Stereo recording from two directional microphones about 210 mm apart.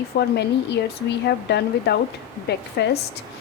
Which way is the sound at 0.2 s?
55° left (ahead or behind).